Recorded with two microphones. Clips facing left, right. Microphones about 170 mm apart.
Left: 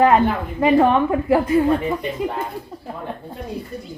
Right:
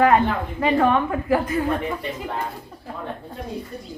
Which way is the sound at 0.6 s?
20° left (ahead or behind).